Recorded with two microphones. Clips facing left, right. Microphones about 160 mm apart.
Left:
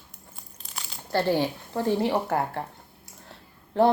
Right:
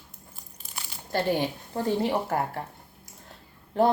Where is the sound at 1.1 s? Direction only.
15° right (ahead or behind).